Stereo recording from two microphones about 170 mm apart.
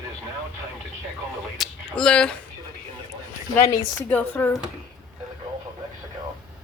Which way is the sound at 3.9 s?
10° left (ahead or behind).